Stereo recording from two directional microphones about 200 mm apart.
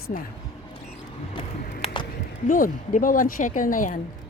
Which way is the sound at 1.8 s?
25° left (ahead or behind).